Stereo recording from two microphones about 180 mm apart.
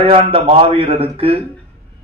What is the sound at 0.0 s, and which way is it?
A man's voice, 30° right (ahead or behind).